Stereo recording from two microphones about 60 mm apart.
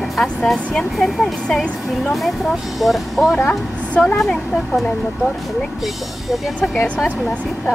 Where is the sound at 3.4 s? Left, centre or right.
Left.